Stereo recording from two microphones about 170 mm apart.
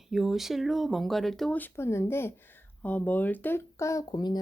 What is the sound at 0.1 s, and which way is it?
Speech, centre (ahead or behind).